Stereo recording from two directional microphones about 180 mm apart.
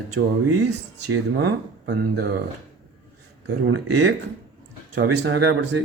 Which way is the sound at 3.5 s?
75° right (ahead or behind).